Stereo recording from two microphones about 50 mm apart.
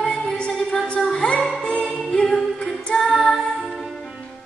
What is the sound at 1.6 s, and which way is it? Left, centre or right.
Music, centre.